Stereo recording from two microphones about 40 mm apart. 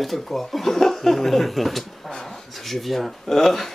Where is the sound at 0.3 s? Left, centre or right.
Centre.